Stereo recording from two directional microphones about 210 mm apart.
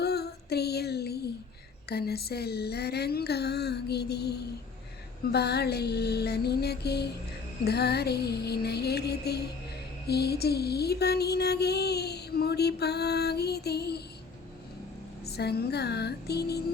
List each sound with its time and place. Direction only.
0.0 s a sound: 50° left (ahead or behind)
1.9 s music: 50° left (ahead or behind)
15.3 s music: 50° left (ahead or behind)